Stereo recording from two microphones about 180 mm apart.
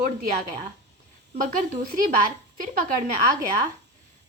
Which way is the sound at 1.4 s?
50° right (ahead or behind).